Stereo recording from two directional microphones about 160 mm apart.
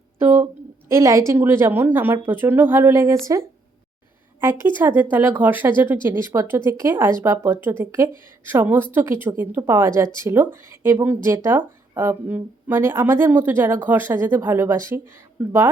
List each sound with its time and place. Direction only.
0.2 s a sound: 15° right (ahead or behind)
0.9 s a woman's voice: 20° right (ahead or behind)
4.4 s speech: 15° right (ahead or behind)